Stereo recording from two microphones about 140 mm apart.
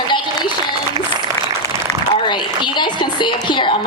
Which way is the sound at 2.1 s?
35° left (ahead or behind).